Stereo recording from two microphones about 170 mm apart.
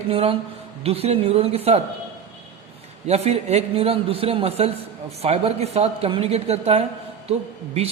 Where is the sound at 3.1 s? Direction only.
40° right (ahead or behind).